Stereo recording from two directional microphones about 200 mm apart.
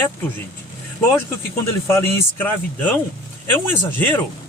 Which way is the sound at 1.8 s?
10° left (ahead or behind).